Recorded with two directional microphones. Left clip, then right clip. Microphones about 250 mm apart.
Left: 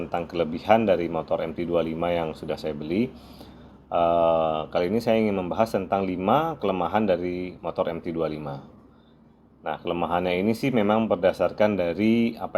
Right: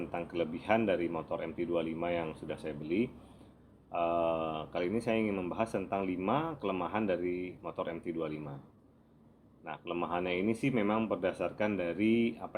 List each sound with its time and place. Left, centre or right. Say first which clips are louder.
0.1 s speech: left 11 dB; left
9.6 s speech: left 10 dB; left